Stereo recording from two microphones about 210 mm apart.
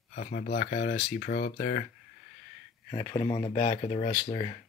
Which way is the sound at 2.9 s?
25° left (ahead or behind).